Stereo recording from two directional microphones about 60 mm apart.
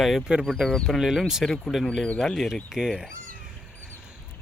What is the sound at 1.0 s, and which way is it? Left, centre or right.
Speech, centre.